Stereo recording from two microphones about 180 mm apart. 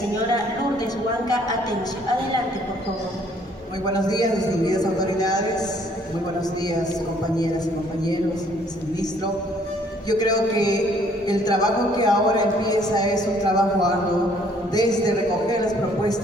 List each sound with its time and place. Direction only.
3.8 s a man's voice: 20° left (ahead or behind)
10.1 s a man's voice: 20° left (ahead or behind)